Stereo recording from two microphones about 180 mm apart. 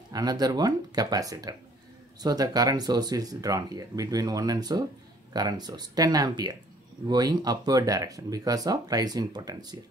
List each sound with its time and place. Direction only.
0.1 s speech: 20° right (ahead or behind)